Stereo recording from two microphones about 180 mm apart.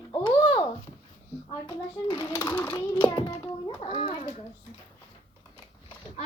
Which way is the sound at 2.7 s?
25° left (ahead or behind).